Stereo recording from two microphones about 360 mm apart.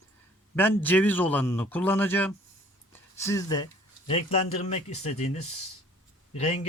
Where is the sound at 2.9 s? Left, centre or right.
Centre.